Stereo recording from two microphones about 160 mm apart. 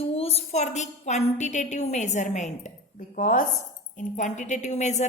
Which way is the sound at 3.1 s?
60° left (ahead or behind).